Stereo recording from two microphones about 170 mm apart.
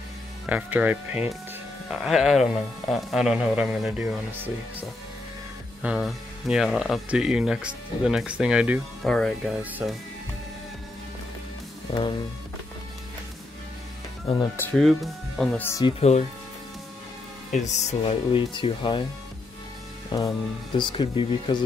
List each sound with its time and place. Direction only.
0.5 s speech: 10° right (ahead or behind)
5.8 s speech: 5° right (ahead or behind)
14.6 s speech: 5° left (ahead or behind)
16.0 s speech: 40° left (ahead or behind)
17.5 s speech: 40° left (ahead or behind)
20.1 s speech: 25° left (ahead or behind)